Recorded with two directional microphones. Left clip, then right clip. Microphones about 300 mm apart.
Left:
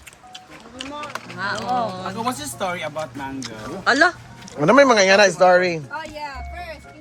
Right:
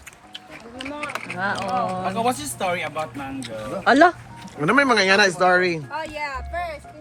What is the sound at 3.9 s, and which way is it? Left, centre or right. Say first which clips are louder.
Speech: right 1 dB; centre.